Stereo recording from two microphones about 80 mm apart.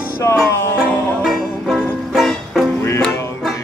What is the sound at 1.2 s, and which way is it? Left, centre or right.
Music, centre.